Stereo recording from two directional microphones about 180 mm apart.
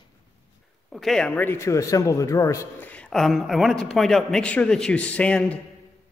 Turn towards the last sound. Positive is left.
turn(degrees=5)  # may be behind; listen again after turning